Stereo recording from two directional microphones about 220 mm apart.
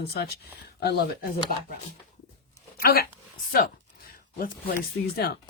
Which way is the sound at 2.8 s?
45° left (ahead or behind).